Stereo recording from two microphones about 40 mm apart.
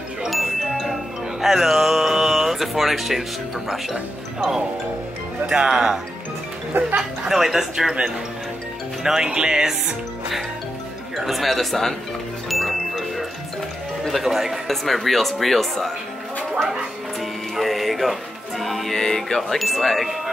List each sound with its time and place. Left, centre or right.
0.3 s wind chime: centre
1.4 s speech: centre
7.0 s speech: centre
9.0 s speech: centre
11.1 s speech: centre
12.4 s music: centre
14.0 s speech: centre
17.6 s music: centre
18.9 s speech: centre